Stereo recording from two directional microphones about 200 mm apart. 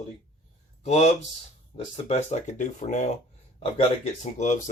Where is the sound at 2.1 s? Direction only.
35° left (ahead or behind).